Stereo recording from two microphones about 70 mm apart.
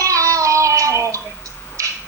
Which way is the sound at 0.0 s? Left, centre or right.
Right.